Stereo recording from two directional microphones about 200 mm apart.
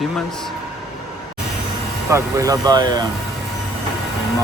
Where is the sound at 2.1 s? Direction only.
15° right (ahead or behind).